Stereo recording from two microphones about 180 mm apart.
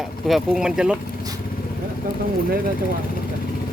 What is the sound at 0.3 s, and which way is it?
Speech, centre (ahead or behind).